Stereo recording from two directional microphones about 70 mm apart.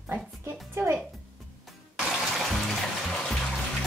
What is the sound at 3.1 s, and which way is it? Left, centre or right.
Music, centre.